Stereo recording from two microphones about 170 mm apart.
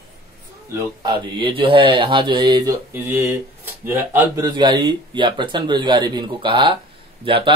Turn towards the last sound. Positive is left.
turn(degrees=-30)  # may be behind; listen again after turning